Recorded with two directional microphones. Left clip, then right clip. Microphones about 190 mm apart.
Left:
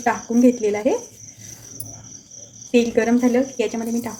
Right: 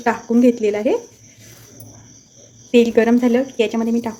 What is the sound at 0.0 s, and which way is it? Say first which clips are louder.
Speech: right 2 dB; 30° right (ahead or behind).